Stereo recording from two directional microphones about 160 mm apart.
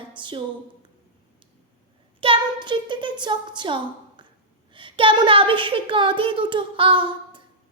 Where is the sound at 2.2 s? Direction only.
30° right (ahead or behind).